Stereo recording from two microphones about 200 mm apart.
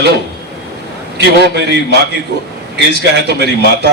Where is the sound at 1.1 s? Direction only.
55° right (ahead or behind).